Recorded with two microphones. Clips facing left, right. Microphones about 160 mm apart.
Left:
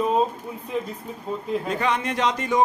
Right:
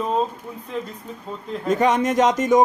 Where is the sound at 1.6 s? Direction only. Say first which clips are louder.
Right 10 dB; 45° right (ahead or behind).